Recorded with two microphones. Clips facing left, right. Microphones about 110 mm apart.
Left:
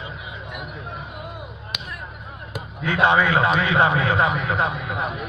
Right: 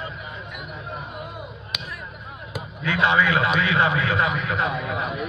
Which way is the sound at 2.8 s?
45° left (ahead or behind).